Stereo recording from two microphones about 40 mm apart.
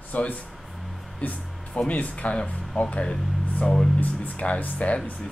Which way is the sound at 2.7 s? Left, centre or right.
Left.